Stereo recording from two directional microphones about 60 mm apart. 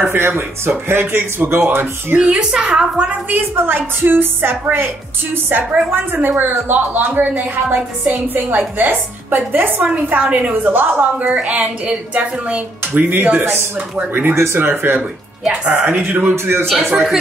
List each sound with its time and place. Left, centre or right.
0.1 s a woman's voice: right
2.1 s a woman's voice: centre
3.1 s a woman's voice: right
11.3 s a woman's voice: right
14.3 s a woman's voice: right
15.4 s speech: centre
16.0 s a woman's voice: right
16.6 s speech: centre
16.9 s a woman's voice: centre